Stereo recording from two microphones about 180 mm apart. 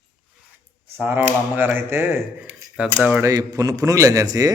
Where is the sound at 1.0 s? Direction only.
10° right (ahead or behind).